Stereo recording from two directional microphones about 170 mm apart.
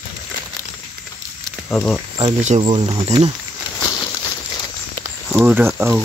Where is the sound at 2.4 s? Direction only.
35° right (ahead or behind).